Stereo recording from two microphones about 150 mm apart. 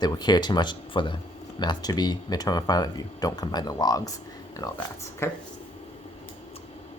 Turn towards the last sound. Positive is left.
turn(degrees=20)  # may be behind; listen again after turning